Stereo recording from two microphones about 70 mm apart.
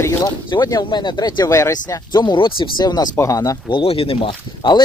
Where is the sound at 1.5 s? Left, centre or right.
Left.